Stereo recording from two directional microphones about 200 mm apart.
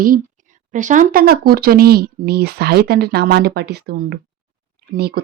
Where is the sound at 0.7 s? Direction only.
40° right (ahead or behind).